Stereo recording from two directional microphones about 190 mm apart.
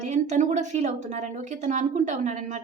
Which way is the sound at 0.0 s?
40° right (ahead or behind).